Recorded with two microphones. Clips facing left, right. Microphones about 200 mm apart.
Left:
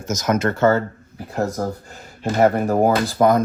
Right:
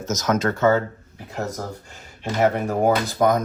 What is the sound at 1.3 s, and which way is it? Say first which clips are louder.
Speech: left 6 dB; 45° left (ahead or behind).